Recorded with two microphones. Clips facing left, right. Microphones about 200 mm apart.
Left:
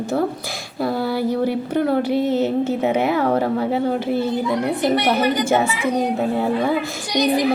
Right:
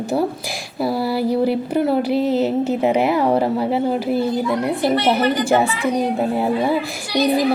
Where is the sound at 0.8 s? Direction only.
10° right (ahead or behind).